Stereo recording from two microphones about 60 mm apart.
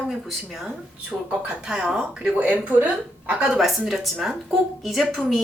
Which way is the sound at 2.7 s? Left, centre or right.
Right.